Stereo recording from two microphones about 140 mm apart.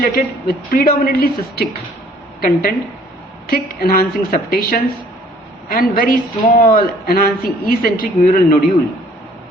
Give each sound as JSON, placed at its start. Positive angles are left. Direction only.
{"t": 0.0, "sound": "a man's voice", "side_deg": 90}